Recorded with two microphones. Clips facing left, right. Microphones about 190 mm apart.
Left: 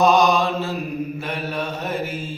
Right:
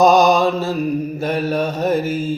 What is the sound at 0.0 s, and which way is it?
Mantra, 45° right (ahead or behind).